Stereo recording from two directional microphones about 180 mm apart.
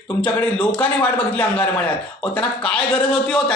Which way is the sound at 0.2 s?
10° left (ahead or behind).